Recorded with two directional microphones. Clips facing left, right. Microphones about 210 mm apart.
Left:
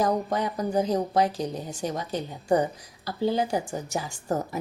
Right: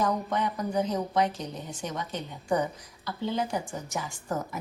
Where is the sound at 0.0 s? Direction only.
35° left (ahead or behind).